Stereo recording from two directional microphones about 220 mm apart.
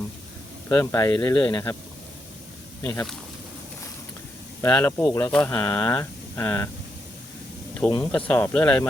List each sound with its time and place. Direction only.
0.7 s speech: 15° left (ahead or behind)
2.8 s speech: 10° left (ahead or behind)
4.6 s speech: 10° left (ahead or behind)
7.8 s speech: 10° left (ahead or behind)